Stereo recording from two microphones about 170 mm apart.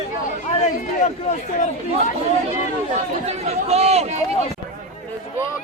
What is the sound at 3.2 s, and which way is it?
Speech, 40° right (ahead or behind).